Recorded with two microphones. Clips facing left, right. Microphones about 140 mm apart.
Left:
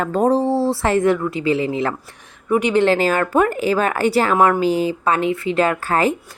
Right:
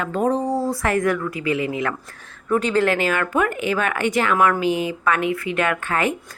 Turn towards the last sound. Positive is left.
turn(degrees=35)  # may be behind; listen again after turning